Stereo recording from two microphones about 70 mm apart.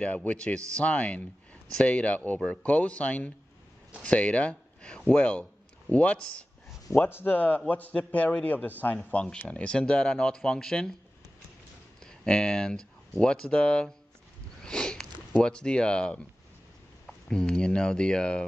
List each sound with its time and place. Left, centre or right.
0.0 s a man's voice: centre
6.9 s a man's voice: left; by 10.9 s centre
12.0 s speech: centre
14.6 s sniff: centre
15.3 s speech: centre